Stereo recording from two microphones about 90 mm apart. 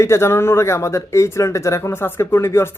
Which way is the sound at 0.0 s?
30° left (ahead or behind).